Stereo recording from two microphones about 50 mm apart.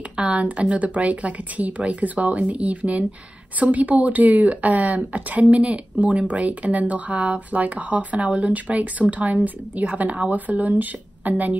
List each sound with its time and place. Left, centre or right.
0.1 s speech: right